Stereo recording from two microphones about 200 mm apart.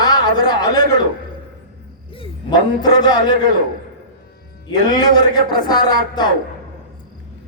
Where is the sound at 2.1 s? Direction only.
25° left (ahead or behind).